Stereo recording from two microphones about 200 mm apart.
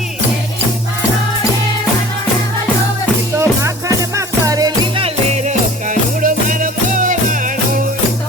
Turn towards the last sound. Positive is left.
turn(degrees=-40)  # may be behind; listen again after turning